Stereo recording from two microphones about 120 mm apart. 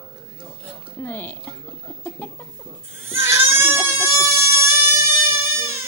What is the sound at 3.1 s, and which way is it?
Goat, 20° right (ahead or behind).